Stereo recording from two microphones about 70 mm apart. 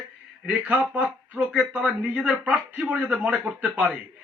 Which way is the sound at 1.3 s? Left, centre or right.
Centre.